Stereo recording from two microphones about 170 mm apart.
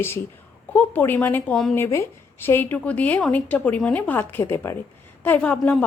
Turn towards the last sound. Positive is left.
turn(degrees=5)  # may be behind; listen again after turning